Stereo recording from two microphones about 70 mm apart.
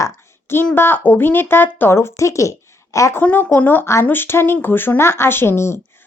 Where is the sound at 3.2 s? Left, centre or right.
Left.